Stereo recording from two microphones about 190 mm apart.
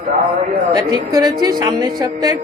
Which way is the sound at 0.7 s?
20° right (ahead or behind).